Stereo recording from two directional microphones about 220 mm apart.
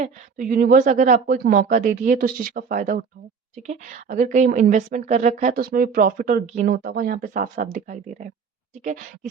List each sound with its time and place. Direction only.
0.0 s a woman's voice: 40° right (ahead or behind)